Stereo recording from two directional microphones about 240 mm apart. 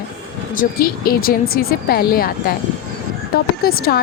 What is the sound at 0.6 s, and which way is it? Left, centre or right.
A woman's voice, left.